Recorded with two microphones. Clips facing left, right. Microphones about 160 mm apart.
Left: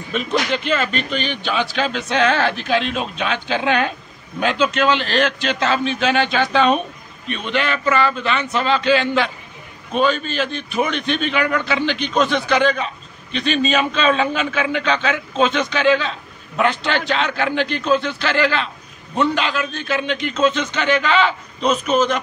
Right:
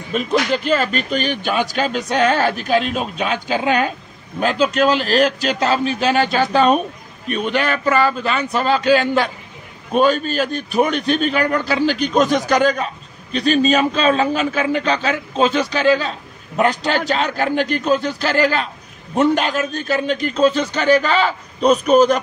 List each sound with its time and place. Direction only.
0.1 s a man's voice: 40° right (ahead or behind)